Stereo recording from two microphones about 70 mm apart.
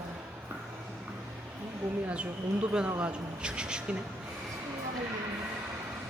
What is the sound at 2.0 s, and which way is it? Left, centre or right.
Speech, centre.